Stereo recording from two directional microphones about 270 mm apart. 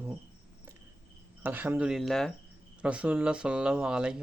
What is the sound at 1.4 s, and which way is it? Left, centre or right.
Speech, centre.